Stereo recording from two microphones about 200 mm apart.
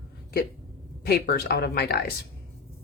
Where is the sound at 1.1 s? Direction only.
50° left (ahead or behind).